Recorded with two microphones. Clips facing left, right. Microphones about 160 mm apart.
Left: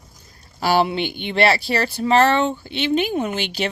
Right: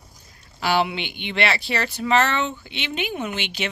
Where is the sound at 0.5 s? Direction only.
40° left (ahead or behind).